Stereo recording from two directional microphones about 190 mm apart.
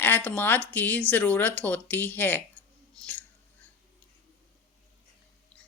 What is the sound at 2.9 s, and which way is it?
Whispering, 5° left (ahead or behind).